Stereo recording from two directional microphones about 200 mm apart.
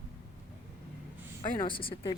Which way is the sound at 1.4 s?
20° left (ahead or behind).